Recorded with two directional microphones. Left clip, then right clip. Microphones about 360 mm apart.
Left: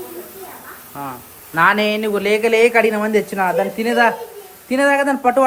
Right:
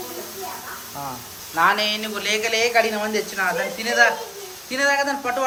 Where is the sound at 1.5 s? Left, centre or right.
Centre.